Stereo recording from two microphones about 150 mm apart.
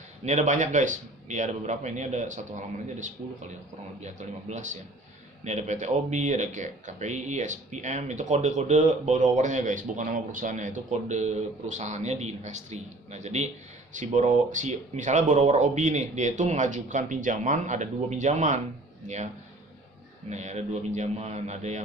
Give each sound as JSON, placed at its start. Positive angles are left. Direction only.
{"t": 0.3, "sound": "speech", "side_deg": -55}
{"t": 20.3, "sound": "speech", "side_deg": -50}